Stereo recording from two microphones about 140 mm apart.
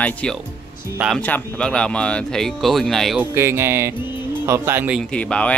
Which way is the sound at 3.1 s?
15° right (ahead or behind).